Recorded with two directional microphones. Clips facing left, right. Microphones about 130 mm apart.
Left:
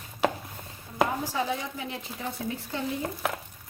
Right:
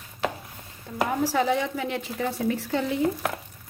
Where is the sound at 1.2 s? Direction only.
80° right.